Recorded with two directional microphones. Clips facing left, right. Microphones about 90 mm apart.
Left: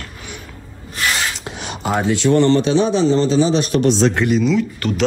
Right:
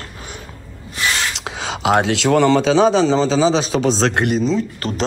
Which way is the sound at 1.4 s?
90° right.